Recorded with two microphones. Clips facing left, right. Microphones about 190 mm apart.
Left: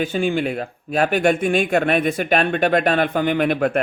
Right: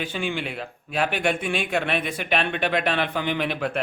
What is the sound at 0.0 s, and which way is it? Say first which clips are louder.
Speech: left 8 dB; 45° left (ahead or behind).